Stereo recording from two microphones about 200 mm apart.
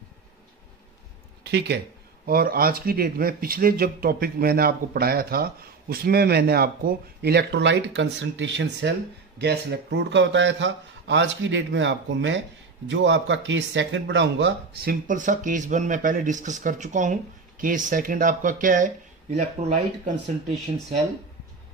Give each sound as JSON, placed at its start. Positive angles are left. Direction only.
{"t": 1.4, "sound": "speech", "side_deg": -55}